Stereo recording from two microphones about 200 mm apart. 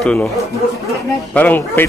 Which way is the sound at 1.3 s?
10° left (ahead or behind).